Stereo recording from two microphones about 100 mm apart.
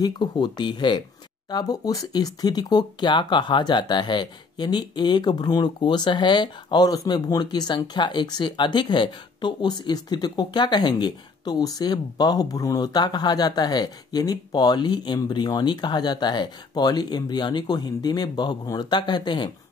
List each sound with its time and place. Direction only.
0.0 s speech: 45° left (ahead or behind)